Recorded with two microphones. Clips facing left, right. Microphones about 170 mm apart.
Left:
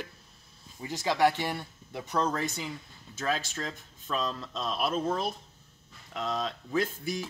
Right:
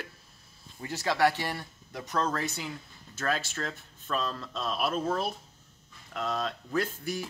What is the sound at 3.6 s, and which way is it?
Speech, 10° left (ahead or behind).